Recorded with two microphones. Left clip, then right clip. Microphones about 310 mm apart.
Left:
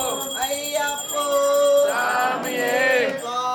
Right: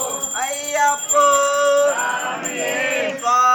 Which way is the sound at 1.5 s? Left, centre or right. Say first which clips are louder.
Right 1 dB; centre.